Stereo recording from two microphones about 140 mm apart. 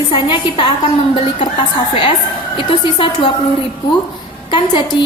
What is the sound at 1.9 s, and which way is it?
A woman's voice, 35° left (ahead or behind).